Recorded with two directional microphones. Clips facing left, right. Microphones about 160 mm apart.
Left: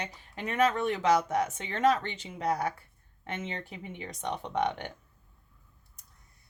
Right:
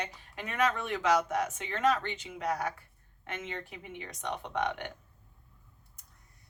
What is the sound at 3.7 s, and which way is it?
Speech, 35° left (ahead or behind).